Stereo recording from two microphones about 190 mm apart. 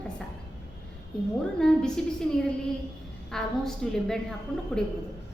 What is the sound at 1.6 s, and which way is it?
Speech, 5° left (ahead or behind).